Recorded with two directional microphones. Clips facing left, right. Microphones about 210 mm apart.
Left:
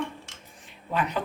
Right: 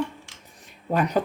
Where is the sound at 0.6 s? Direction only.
40° right (ahead or behind).